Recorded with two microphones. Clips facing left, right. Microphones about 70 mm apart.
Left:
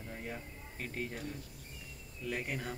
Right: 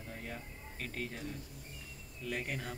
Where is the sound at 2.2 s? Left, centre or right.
Centre.